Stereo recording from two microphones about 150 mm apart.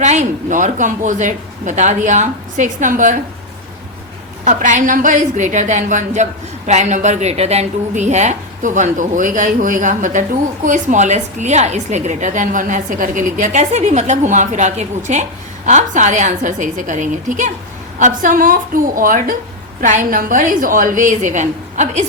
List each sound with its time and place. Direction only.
0.0 s a woman's voice: 50° right (ahead or behind)
4.4 s a woman's voice: 55° right (ahead or behind)